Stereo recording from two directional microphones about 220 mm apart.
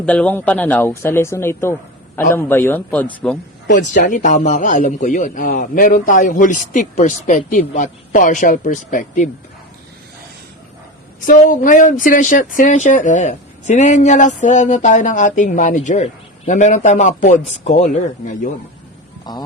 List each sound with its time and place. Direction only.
0.0 s speech: 5° left (ahead or behind)
3.8 s a man's voice: 35° left (ahead or behind)
11.3 s a man's voice: 35° left (ahead or behind)
19.3 s music: 20° left (ahead or behind)